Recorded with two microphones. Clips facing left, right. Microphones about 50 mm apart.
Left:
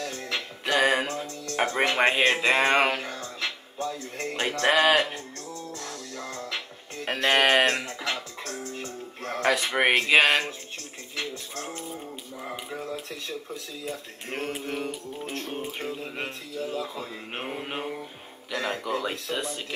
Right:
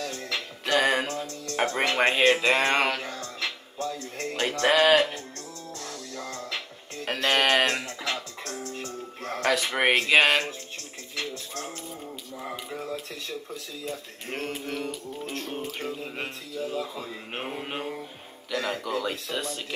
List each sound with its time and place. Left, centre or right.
0.0 s music: centre
7.1 s speech: centre
11.1 s music: centre
15.8 s a sound: centre
18.5 s music: centre